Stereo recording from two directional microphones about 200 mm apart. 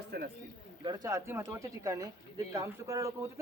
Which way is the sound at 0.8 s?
20° right (ahead or behind).